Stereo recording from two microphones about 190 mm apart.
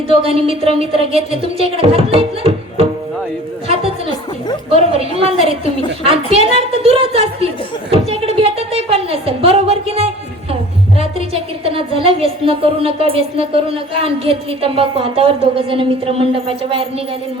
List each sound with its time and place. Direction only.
0.1 s a woman's voice: 30° right (ahead or behind)
4.7 s a woman's voice: 30° right (ahead or behind)